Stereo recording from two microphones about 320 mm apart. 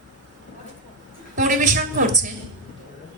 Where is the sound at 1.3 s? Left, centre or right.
Right.